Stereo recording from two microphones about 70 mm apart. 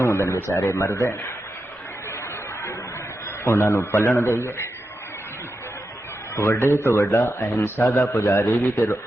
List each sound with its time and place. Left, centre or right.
0.0 s a sound: left
0.4 s speech: left
3.4 s speech: left
6.3 s a man's voice: left